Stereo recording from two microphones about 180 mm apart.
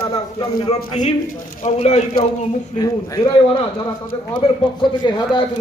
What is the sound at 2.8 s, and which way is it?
A man's voice, 20° left (ahead or behind).